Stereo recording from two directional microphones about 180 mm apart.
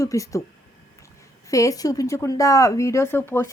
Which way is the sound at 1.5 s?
20° left (ahead or behind).